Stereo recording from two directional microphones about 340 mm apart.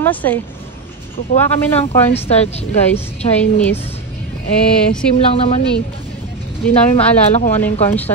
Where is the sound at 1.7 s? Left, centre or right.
Centre.